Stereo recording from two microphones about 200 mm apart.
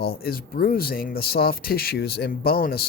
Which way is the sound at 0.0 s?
50° left (ahead or behind).